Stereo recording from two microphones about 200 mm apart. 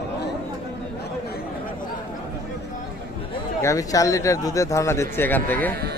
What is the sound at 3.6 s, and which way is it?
Speech, 15° left (ahead or behind).